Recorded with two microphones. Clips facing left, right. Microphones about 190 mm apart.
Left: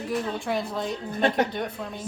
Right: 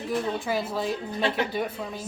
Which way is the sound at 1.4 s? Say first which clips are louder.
Even; 5° right (ahead or behind).